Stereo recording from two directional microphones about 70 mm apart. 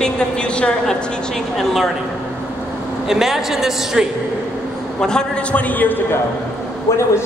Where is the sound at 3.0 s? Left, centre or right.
Centre.